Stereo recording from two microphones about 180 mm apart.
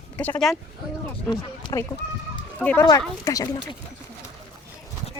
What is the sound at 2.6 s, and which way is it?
Speech, 10° left (ahead or behind).